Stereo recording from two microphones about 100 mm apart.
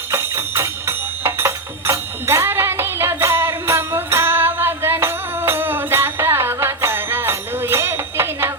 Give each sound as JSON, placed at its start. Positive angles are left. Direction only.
{"t": 0.1, "sound": "music", "side_deg": -25}